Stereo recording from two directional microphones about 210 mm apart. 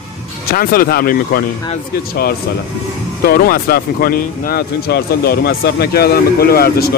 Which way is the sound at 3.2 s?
45° left (ahead or behind).